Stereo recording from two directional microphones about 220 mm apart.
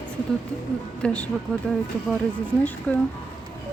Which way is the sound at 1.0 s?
5° left (ahead or behind).